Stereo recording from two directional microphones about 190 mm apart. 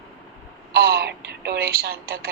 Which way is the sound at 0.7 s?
55° right (ahead or behind).